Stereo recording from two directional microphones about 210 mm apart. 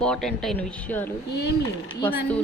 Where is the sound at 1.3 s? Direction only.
55° left (ahead or behind).